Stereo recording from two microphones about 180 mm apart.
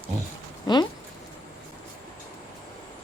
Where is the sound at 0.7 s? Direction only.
25° left (ahead or behind).